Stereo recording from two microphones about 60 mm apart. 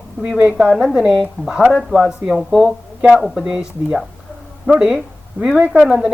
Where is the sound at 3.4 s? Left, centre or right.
Centre.